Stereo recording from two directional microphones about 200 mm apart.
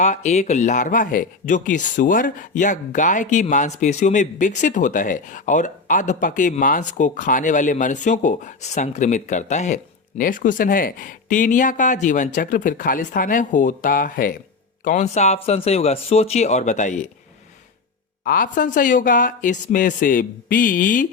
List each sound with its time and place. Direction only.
0.0 s speech: 35° left (ahead or behind)
18.3 s speech: 45° left (ahead or behind)